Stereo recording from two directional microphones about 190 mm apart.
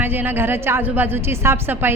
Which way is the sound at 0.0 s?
10° right (ahead or behind).